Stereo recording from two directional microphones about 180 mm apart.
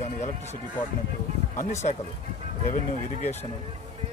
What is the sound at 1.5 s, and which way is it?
Speech, 45° left (ahead or behind).